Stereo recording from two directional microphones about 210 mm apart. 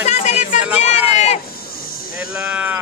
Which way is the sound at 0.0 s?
35° left (ahead or behind).